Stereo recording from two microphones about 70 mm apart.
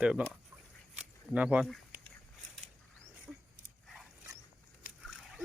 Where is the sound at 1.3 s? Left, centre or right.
Centre.